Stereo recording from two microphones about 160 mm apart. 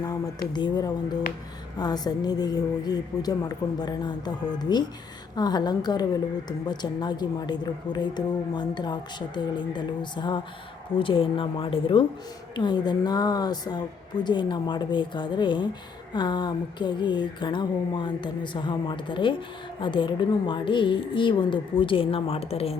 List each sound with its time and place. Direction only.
0.5 s a woman's voice: 25° left (ahead or behind)